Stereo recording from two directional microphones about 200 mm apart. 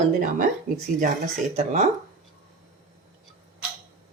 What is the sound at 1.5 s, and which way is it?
Speech, 40° right (ahead or behind).